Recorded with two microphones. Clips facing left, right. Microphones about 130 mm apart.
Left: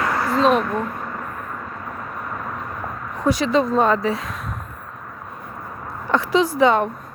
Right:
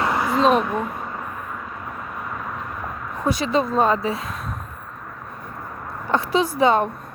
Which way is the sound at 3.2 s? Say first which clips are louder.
Left 3 dB; 25° right (ahead or behind).